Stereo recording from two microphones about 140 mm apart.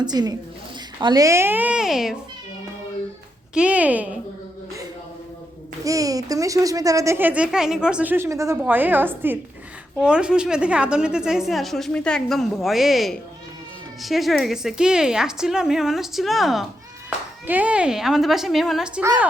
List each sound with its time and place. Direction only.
0.0 s a woman's voice: 30° right (ahead or behind); by 2.1 s 5° right (ahead or behind)
3.5 s speech: 10° right (ahead or behind)
5.8 s a woman's voice: 25° right (ahead or behind); by 19.0 s 5° right (ahead or behind)